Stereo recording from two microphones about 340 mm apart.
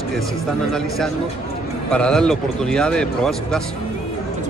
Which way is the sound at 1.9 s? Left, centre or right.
Centre.